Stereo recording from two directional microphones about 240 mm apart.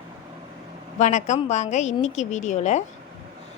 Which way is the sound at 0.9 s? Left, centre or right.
Left.